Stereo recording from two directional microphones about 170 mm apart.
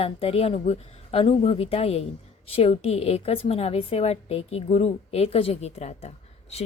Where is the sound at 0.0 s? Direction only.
35° left (ahead or behind).